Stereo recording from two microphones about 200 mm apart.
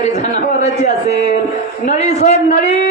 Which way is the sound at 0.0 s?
35° left (ahead or behind).